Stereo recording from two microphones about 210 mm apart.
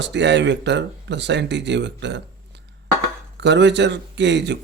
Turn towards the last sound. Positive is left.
turn(degrees=-55)  # may be behind; listen again after turning